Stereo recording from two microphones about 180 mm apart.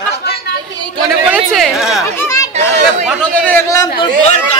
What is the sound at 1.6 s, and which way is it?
Speech, centre (ahead or behind).